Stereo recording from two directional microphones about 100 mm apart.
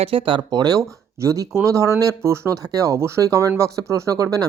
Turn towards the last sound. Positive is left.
turn(degrees=-35)  # may be behind; listen again after turning